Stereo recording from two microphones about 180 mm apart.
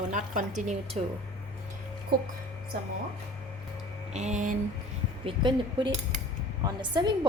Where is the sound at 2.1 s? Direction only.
55° right (ahead or behind).